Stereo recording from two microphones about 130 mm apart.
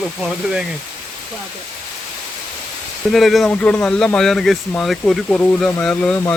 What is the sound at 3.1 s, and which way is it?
Speech, centre (ahead or behind).